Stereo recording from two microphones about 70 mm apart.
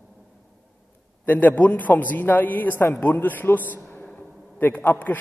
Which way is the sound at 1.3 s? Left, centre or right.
Left.